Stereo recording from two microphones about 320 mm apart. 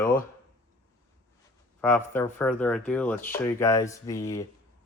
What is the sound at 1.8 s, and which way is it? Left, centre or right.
Speech, centre.